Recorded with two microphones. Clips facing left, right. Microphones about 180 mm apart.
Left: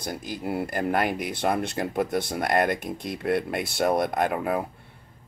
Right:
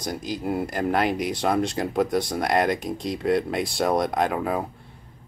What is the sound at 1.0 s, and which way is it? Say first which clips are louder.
Speech: right 3 dB; 50° left (ahead or behind).